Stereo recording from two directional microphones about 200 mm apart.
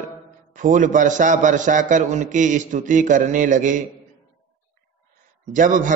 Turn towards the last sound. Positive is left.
turn(degrees=-40)  # may be behind; listen again after turning